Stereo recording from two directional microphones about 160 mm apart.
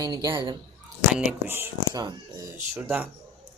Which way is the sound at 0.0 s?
25° right (ahead or behind).